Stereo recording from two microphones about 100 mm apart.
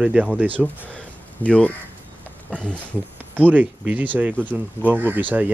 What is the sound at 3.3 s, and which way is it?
Speech, 15° right (ahead or behind).